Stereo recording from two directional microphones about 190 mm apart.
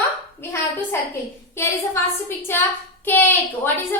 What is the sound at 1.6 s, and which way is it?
A woman's voice, 15° left (ahead or behind).